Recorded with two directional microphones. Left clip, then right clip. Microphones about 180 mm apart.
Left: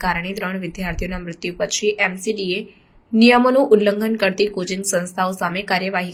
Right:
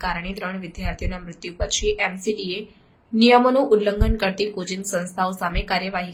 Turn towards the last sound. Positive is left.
turn(degrees=15)  # may be behind; listen again after turning